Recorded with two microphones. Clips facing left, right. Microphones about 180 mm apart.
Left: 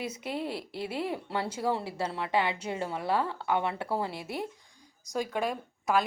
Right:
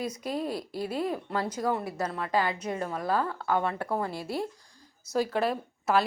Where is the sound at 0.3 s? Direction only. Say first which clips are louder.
Right 2 dB; 25° left (ahead or behind).